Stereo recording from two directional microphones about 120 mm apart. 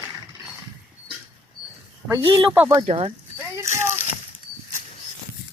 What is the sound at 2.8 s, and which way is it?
Speech, 55° right (ahead or behind).